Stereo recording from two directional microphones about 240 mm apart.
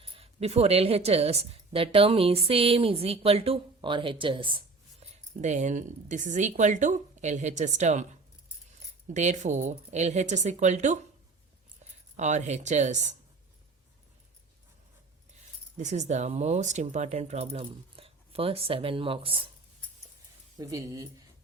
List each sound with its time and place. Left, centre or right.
0.0 s speech: right
9.0 s speech: right
12.1 s speech: right
15.8 s speech: right
20.6 s speech: centre